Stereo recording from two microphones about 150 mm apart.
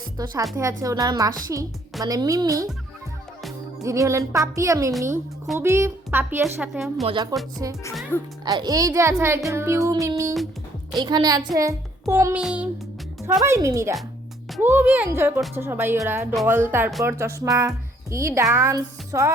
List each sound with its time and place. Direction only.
0.2 s a child's voice: 25° right (ahead or behind)
3.8 s a child's voice: 20° right (ahead or behind)
6.4 s a woman's voice: 5° right (ahead or behind)
7.0 s a child's voice: 30° right (ahead or behind)
8.1 s a child's voice: 15° left (ahead or behind)
8.4 s a child's voice: 25° right (ahead or behind)
12.4 s a woman's voice: 5° right (ahead or behind)
13.4 s a child's voice: 20° right (ahead or behind)